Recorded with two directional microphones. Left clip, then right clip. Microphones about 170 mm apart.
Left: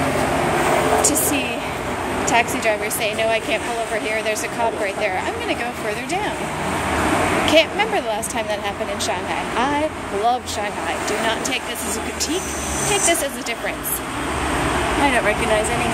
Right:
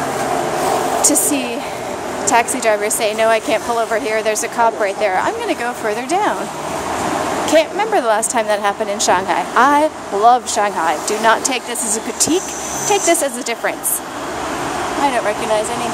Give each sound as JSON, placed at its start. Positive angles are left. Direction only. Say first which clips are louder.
{"t": 2.2, "sound": "a woman's voice", "louder": "right 4 dB", "side_deg": -35}
{"t": 4.8, "sound": "a woman's voice", "louder": "right 5 dB", "side_deg": -30}
{"t": 7.4, "sound": "speech", "louder": "right 4 dB", "side_deg": -25}
{"t": 8.1, "sound": "a woman's voice", "louder": "right 7 dB", "side_deg": -40}
{"t": 15.0, "sound": "speech", "louder": "right 2 dB", "side_deg": -10}